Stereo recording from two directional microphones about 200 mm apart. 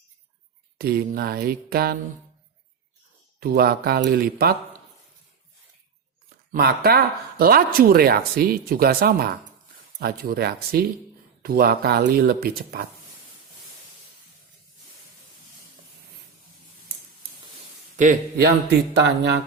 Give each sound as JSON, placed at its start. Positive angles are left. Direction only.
{"t": 0.8, "sound": "speech", "side_deg": -50}
{"t": 3.4, "sound": "speech", "side_deg": -50}
{"t": 6.5, "sound": "speech", "side_deg": -50}
{"t": 17.9, "sound": "speech", "side_deg": -45}